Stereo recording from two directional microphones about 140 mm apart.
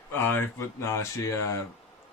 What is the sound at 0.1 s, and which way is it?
Speech, 15° left (ahead or behind).